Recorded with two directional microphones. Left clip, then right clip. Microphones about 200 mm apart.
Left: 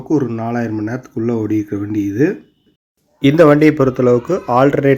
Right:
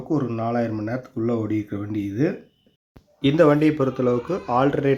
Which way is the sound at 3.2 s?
25° left (ahead or behind).